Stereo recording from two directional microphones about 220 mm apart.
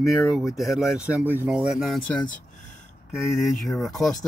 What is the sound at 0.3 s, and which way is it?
Speech, centre (ahead or behind).